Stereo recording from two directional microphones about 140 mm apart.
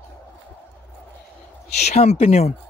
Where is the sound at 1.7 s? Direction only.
50° left (ahead or behind).